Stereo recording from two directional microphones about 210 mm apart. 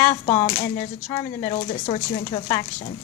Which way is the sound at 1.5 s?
30° left (ahead or behind).